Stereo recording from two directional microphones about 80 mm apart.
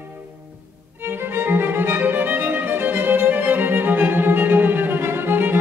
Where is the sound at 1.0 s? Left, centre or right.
Right.